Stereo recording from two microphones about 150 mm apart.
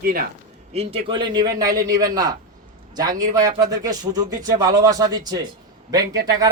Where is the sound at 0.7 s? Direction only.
40° right (ahead or behind).